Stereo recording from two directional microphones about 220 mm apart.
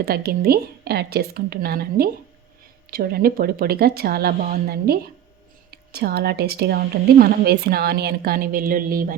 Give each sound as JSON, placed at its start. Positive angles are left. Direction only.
{"t": 0.0, "sound": "a woman's voice", "side_deg": -45}